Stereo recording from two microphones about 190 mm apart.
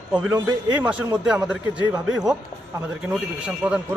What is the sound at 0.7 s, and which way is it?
Speech, 5° right (ahead or behind).